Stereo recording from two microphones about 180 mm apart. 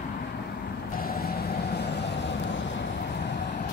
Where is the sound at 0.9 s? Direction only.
55° left (ahead or behind); by 2.6 s 80° left.